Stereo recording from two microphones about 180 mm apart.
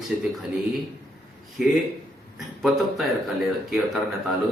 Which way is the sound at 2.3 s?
Centre (ahead or behind).